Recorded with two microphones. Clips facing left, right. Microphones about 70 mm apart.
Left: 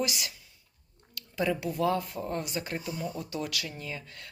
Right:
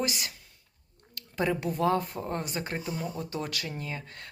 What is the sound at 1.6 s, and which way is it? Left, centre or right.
Speech, right.